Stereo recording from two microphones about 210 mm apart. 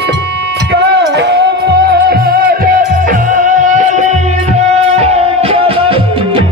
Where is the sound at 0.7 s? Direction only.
55° right (ahead or behind).